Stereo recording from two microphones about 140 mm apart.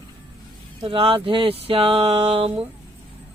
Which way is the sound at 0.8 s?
40° right (ahead or behind).